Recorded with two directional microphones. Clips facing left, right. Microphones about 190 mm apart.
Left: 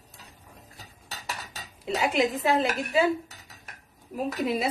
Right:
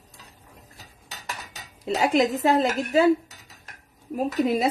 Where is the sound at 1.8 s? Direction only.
40° right (ahead or behind).